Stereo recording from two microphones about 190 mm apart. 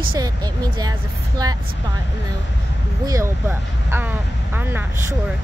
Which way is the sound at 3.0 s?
15° right (ahead or behind).